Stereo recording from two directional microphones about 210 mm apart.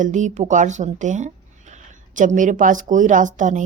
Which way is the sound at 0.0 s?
35° right (ahead or behind).